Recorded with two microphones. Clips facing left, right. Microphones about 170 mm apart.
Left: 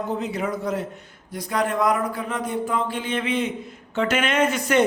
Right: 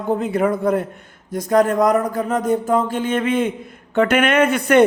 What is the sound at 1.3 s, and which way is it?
A man's voice, 45° right (ahead or behind).